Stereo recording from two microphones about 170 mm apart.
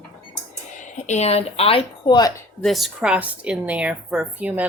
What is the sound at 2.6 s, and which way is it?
A woman's voice, centre (ahead or behind).